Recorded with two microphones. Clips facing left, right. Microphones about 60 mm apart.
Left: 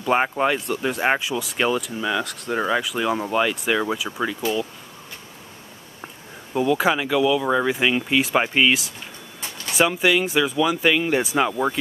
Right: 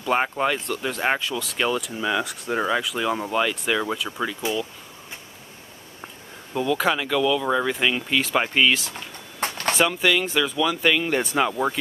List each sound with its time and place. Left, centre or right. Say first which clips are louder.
0.0 s speech: left 2 dB; centre
6.5 s speech: left 3 dB; centre
9.4 s a sound: right 8 dB; right
9.8 s speech: left 3 dB; centre